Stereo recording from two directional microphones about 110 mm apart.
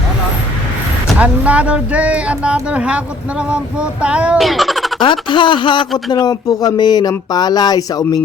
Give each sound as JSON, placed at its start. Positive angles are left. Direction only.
{"t": 1.2, "sound": "speech", "side_deg": -10}
{"t": 4.4, "sound": "speech", "side_deg": 0}
{"t": 5.3, "sound": "speech", "side_deg": 45}